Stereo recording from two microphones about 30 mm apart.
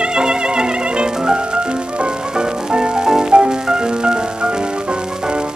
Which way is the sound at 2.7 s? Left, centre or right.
Right.